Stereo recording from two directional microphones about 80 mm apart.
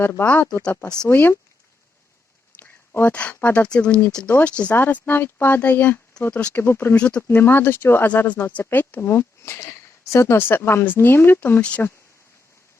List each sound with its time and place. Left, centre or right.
0.0 s speech: left
2.6 s a sound: left
3.1 s speech: centre
6.6 s speech: left
6.9 s speech: centre
7.2 s speech: left